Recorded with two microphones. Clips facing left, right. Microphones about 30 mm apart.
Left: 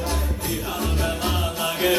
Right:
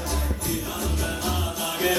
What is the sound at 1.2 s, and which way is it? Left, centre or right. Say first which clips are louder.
Music: left 3 dB; left.